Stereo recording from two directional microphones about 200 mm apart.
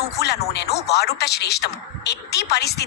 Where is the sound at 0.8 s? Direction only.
55° left (ahead or behind).